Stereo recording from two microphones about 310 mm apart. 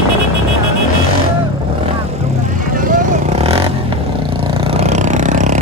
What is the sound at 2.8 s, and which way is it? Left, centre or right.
Vehicle, right.